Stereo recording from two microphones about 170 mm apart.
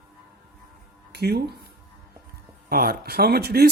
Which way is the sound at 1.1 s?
75° right (ahead or behind).